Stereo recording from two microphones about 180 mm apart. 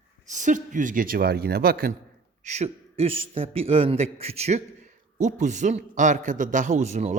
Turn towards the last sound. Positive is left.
turn(degrees=-40)  # may be behind; listen again after turning